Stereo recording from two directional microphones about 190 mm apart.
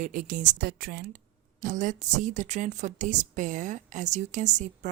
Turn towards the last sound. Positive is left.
turn(degrees=-40)  # may be behind; listen again after turning